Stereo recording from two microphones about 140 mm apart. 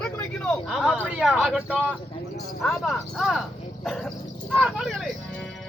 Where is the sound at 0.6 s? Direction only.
5° left (ahead or behind).